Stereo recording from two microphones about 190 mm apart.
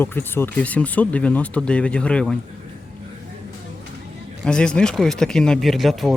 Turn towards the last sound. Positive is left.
turn(degrees=0)  # may be behind; listen again after turning